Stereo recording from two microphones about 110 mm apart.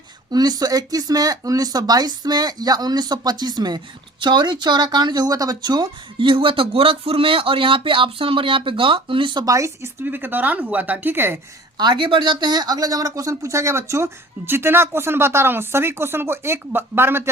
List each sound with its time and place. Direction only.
0.3 s speech: 35° right (ahead or behind)
9.5 s speech: 25° right (ahead or behind)
11.8 s speech: 45° right (ahead or behind); by 17.3 s 20° right (ahead or behind)